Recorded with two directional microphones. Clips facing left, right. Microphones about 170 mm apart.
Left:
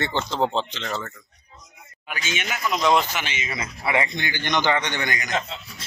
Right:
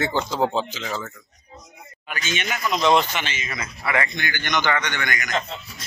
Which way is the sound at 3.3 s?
25° left (ahead or behind).